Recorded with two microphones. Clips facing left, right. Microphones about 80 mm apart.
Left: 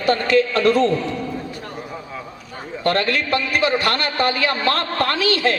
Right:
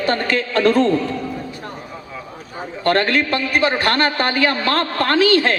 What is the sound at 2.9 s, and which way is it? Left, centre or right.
A man's voice, right.